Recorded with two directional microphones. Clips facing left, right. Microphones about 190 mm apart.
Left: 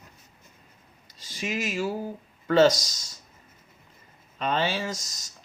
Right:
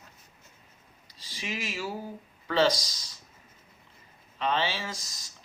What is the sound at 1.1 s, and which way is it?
Speech, 45° left (ahead or behind).